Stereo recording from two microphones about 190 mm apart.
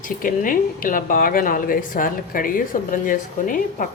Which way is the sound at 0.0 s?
45° left (ahead or behind).